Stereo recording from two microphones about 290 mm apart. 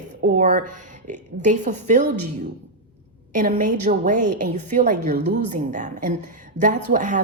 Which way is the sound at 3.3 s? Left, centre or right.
Right.